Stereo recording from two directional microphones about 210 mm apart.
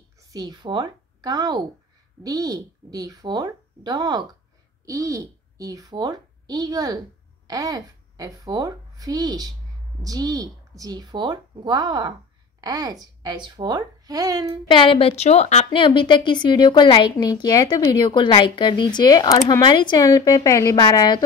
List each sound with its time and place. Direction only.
0.3 s a woman's voice: 20° right (ahead or behind)
14.7 s a woman's voice: 25° left (ahead or behind)